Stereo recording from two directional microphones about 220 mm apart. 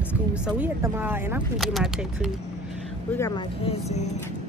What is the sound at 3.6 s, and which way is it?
Speech, 30° left (ahead or behind).